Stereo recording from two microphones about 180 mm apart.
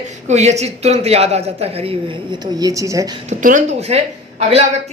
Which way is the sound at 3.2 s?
45° right (ahead or behind).